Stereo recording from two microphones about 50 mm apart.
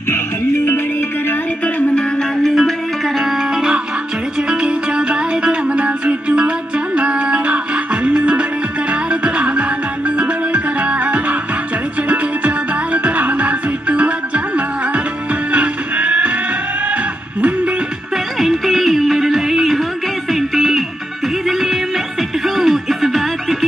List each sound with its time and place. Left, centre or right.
2.4 s music: centre; by 14.4 s right
15.5 s music: right
16.9 s a sound: right
18.1 s music: centre